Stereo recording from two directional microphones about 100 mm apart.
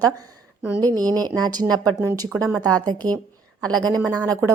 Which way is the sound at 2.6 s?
40° right (ahead or behind).